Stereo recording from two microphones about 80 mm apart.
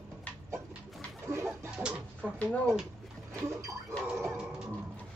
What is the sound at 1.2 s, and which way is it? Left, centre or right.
Chicken, right.